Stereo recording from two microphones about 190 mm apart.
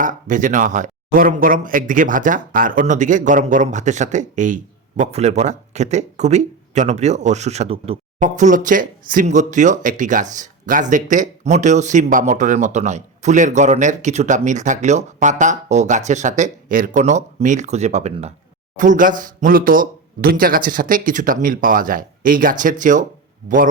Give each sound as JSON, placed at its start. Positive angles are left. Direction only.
{"t": 0.0, "sound": "speech", "side_deg": -45}